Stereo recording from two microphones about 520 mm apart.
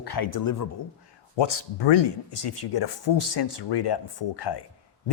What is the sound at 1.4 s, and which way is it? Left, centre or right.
Speech, left.